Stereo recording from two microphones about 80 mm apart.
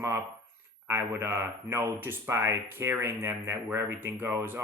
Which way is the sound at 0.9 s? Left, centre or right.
Right.